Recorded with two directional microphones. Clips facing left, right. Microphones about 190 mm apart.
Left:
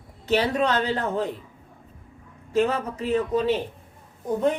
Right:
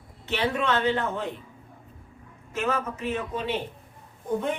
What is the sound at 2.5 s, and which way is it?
Speech, 35° left (ahead or behind).